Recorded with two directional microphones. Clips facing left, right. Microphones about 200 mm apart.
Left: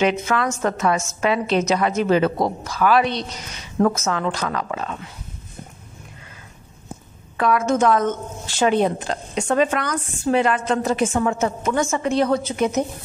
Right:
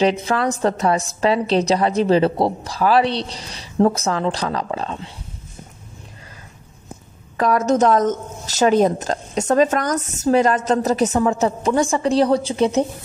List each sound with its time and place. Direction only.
0.0 s a woman's voice: 35° right (ahead or behind)
7.3 s a woman's voice: 40° right (ahead or behind)